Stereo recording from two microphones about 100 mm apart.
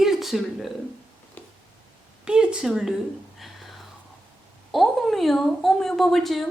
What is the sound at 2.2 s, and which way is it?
Speech, 10° right (ahead or behind).